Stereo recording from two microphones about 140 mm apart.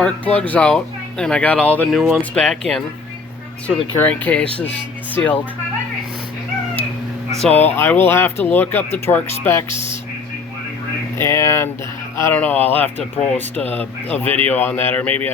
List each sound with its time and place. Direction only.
0.0 s speech: 10° left (ahead or behind)
3.9 s speech: 10° left (ahead or behind)
7.4 s speech: 15° left (ahead or behind)
11.2 s speech: 20° left (ahead or behind)